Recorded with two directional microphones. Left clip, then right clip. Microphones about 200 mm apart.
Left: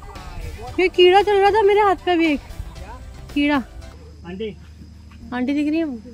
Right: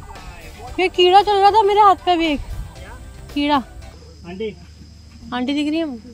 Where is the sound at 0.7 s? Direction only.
35° right (ahead or behind).